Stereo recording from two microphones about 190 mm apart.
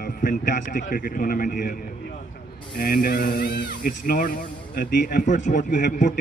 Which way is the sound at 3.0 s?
55° left (ahead or behind).